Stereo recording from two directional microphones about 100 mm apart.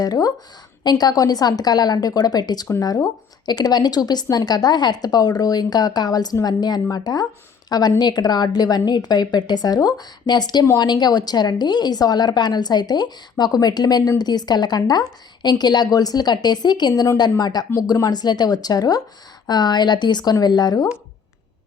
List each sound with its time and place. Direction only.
0.0 s a woman's voice: 40° left (ahead or behind)